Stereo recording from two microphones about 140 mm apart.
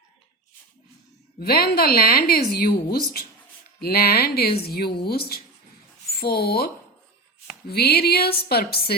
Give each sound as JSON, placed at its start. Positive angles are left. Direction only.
{"t": 1.4, "sound": "a woman's voice", "side_deg": 90}
{"t": 7.7, "sound": "a woman's voice", "side_deg": 90}